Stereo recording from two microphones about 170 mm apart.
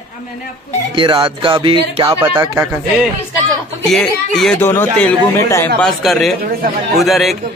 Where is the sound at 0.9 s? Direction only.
30° right (ahead or behind).